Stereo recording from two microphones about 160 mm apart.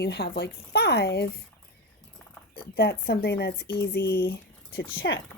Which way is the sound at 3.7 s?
15° left (ahead or behind).